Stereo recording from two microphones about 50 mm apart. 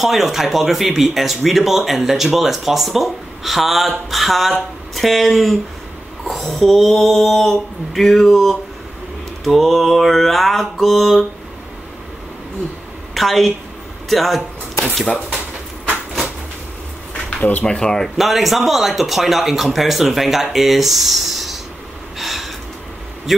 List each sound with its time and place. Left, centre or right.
0.0 s speech: centre
13.1 s a woman's voice: centre
14.0 s a sound: centre
17.4 s speech: left
17.6 s speech: centre
18.1 s speech: centre
22.2 s gasp: centre